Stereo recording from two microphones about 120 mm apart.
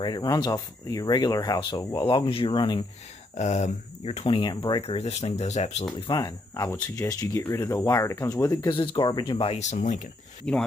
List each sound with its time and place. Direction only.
0.0 s speech: 35° left (ahead or behind)
3.3 s speech: 75° left (ahead or behind); by 4.8 s 35° left (ahead or behind)
4.8 s speech: 60° left (ahead or behind)
6.1 s speech: 30° left (ahead or behind)
8.6 s speech: 45° left (ahead or behind)
9.6 s speech: 75° left (ahead or behind)
10.4 s speech: 10° left (ahead or behind)